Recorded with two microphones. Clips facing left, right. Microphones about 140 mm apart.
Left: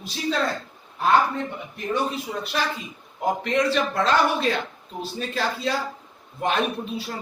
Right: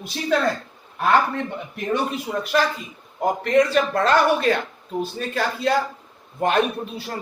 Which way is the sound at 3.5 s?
50° right (ahead or behind).